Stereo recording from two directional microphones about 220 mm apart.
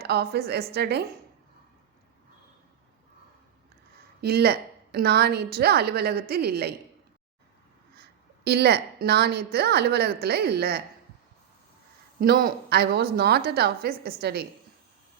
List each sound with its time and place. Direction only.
0.0 s a woman's voice: 45° right (ahead or behind)
4.2 s a woman's voice: 45° right (ahead or behind)
8.4 s a woman's voice: 45° right (ahead or behind)
12.2 s a woman's voice: 45° right (ahead or behind)